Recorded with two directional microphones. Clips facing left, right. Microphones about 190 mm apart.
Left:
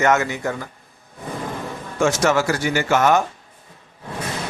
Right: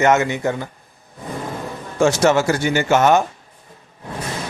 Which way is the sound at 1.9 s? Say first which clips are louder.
Right 3 dB; 30° right (ahead or behind).